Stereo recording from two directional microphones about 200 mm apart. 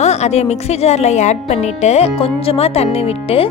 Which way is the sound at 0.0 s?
35° left (ahead or behind).